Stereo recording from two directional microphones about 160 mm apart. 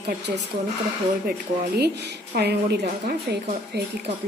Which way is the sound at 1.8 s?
90° right.